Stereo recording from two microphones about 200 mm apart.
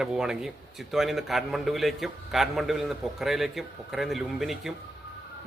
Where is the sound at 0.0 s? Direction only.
5° right (ahead or behind).